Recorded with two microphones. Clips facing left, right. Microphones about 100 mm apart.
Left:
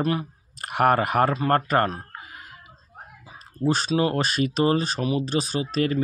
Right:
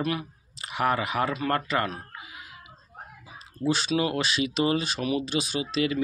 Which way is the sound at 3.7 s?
40° left (ahead or behind).